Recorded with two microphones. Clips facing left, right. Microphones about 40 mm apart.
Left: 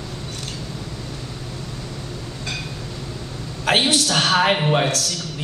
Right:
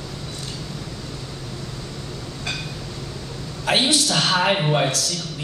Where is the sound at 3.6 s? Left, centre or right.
Left.